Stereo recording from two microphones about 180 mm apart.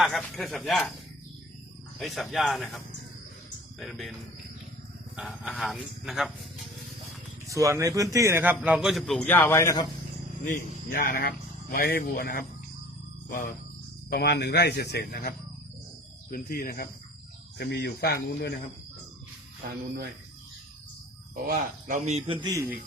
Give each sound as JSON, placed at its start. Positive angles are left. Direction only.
{"t": 0.0, "sound": "speech", "side_deg": 0}
{"t": 2.0, "sound": "speech", "side_deg": 0}
{"t": 5.1, "sound": "speech", "side_deg": -5}
{"t": 7.4, "sound": "a man's voice", "side_deg": -15}
{"t": 10.4, "sound": "speech", "side_deg": 55}
{"t": 14.1, "sound": "speech", "side_deg": 65}
{"t": 17.6, "sound": "speech", "side_deg": 65}
{"t": 21.4, "sound": "a man's voice", "side_deg": -50}